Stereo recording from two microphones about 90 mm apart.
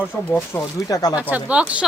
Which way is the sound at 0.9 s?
45° left (ahead or behind).